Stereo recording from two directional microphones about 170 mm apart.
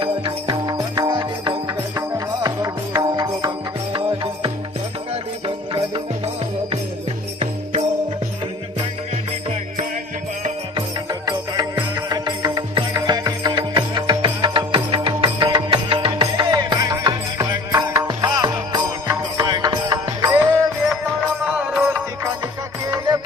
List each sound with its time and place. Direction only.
0.0 s music: 25° right (ahead or behind)
10.8 s music: 25° right (ahead or behind)
21.4 s music: 10° right (ahead or behind)
22.9 s music: 20° right (ahead or behind)